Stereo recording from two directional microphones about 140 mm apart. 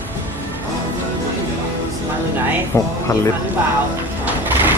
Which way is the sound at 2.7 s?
20° left (ahead or behind).